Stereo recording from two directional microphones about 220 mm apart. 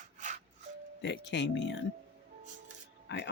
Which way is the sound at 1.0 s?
55° left (ahead or behind).